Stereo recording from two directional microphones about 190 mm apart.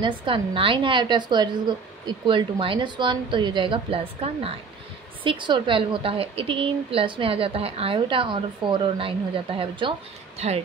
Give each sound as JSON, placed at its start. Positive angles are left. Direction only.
{"t": 0.0, "sound": "a woman's voice", "side_deg": -25}